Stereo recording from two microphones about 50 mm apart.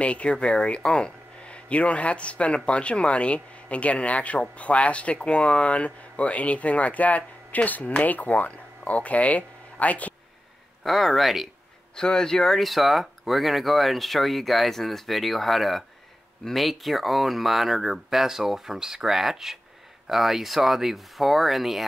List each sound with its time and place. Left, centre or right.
0.0 s speech: left
10.8 s speech: centre
12.0 s speech: centre